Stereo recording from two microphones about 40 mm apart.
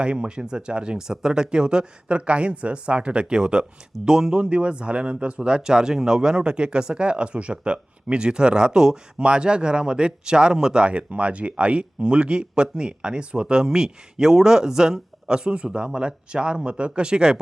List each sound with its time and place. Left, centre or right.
0.0 s speech: right
10.8 s speech: right